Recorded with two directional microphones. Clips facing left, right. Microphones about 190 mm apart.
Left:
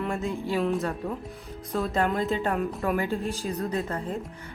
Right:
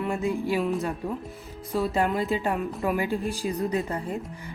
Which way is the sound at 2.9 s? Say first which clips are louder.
Right 1 dB; 15° right (ahead or behind).